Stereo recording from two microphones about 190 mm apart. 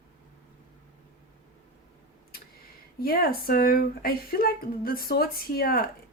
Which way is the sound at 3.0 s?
50° left (ahead or behind).